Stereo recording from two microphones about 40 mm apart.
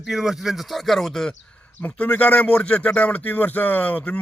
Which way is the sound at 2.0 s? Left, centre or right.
Left.